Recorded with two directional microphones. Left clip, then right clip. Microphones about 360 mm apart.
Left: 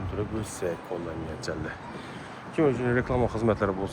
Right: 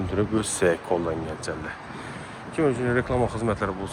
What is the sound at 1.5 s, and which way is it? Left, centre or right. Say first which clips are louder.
Speech: right 2 dB; centre.